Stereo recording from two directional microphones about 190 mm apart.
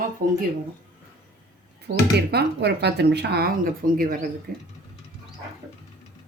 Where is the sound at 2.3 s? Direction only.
60° right (ahead or behind).